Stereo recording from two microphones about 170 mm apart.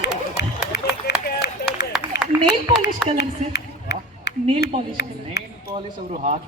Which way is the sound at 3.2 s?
80° left.